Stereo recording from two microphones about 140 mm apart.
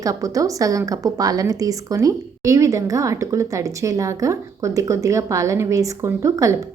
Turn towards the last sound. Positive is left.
turn(degrees=-25)  # may be behind; listen again after turning